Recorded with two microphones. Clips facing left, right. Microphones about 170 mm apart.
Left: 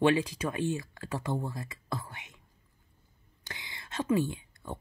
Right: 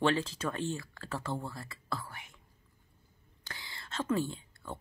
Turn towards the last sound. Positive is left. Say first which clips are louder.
# left 3 dB
turn(degrees=15)  # may be behind; listen again after turning